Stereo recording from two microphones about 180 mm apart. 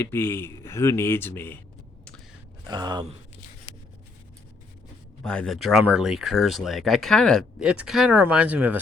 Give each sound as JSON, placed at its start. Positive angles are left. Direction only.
{"t": 0.0, "sound": "speech", "side_deg": 15}
{"t": 2.6, "sound": "speech", "side_deg": -25}
{"t": 5.2, "sound": "speech", "side_deg": 5}